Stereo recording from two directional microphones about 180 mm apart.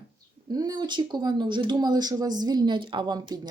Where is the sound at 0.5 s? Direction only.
20° right (ahead or behind).